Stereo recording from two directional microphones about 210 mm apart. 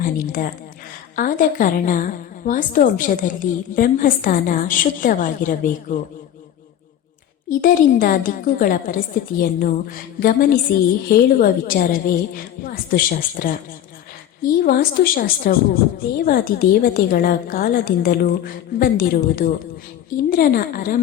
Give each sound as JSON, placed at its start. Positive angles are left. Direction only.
{"t": 0.0, "sound": "a woman's voice", "side_deg": 40}
{"t": 7.5, "sound": "a woman's voice", "side_deg": 40}